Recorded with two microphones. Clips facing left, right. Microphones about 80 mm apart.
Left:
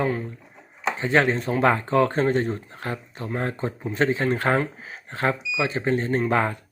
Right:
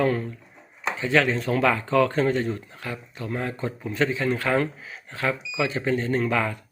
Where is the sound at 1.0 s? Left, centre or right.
Left.